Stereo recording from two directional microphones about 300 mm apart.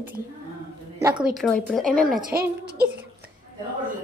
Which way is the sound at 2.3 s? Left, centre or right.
Right.